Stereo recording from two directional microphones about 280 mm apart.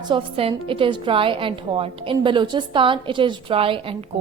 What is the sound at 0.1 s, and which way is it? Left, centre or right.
A woman's voice, centre.